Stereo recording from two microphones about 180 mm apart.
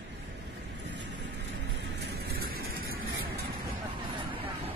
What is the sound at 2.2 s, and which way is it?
Vehicle, 55° right (ahead or behind).